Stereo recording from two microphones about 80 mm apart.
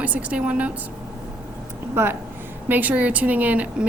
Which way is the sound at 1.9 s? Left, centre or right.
Right.